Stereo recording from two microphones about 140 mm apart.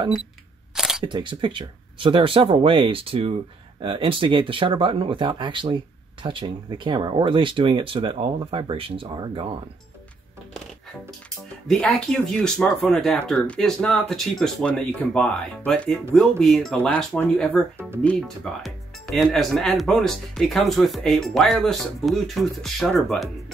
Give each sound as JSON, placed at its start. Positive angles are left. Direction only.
{"t": 0.7, "sound": "single-lens reflex camera", "side_deg": -5}
{"t": 1.0, "sound": "speech", "side_deg": -35}
{"t": 11.6, "sound": "speech", "side_deg": 5}